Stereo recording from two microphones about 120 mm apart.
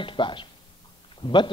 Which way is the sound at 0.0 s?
45° left (ahead or behind).